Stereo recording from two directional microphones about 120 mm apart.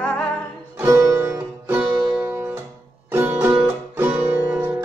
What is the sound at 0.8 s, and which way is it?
Music, 20° right (ahead or behind).